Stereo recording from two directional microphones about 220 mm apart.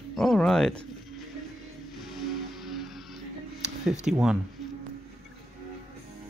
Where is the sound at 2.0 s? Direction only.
Centre (ahead or behind).